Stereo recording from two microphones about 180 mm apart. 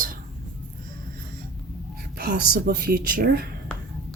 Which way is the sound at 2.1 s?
55° right (ahead or behind).